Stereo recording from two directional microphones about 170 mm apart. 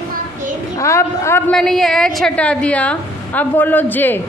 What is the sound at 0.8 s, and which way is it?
Speech, 15° left (ahead or behind).